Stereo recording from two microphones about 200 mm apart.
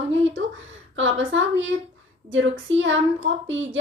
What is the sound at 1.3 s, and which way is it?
A woman's voice, 70° right (ahead or behind).